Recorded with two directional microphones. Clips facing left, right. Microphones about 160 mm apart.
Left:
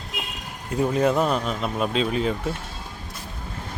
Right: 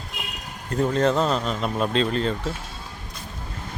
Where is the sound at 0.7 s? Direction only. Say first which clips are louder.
Even; 10° left (ahead or behind).